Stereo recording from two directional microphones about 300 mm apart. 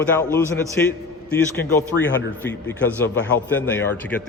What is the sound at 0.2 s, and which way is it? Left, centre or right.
Speech, centre.